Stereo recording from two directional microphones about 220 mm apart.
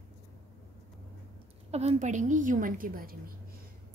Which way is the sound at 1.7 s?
30° right (ahead or behind).